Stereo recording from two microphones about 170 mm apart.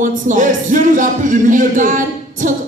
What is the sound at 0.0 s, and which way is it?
Speech, 50° right (ahead or behind).